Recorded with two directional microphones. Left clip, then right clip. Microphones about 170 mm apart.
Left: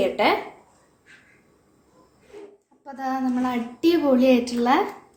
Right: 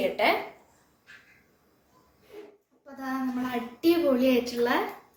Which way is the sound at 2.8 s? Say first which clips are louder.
Left 7 dB; 70° left (ahead or behind).